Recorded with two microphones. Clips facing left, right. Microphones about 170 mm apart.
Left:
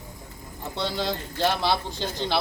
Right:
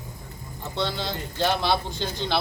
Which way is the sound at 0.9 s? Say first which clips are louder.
Left 3 dB; 35° left (ahead or behind).